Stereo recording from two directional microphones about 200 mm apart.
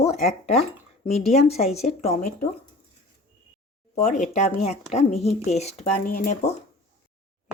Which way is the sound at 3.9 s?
35° left (ahead or behind).